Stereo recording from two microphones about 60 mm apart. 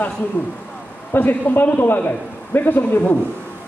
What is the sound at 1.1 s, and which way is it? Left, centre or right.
A man's voice, left.